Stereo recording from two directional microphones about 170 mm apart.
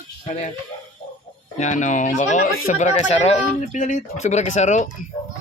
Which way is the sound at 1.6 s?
45° left (ahead or behind).